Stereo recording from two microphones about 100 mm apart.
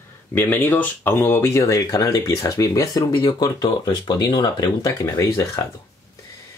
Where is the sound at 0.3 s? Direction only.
20° left (ahead or behind); by 5.7 s 35° left (ahead or behind).